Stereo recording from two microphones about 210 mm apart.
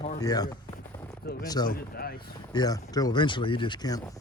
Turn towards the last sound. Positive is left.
turn(degrees=20)  # may be behind; listen again after turning